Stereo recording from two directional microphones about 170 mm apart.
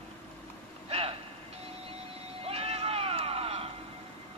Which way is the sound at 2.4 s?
35° right (ahead or behind).